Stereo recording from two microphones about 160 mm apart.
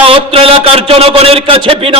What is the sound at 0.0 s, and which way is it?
A man's voice, 35° right (ahead or behind).